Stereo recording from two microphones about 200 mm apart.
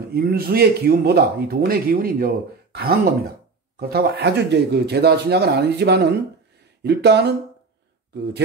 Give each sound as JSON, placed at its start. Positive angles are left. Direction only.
{"t": 0.1, "sound": "speech", "side_deg": -50}